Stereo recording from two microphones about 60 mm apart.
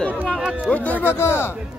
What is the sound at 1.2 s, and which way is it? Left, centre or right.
Speech, left.